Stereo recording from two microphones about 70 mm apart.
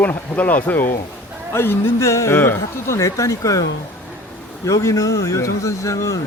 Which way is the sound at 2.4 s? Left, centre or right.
Left.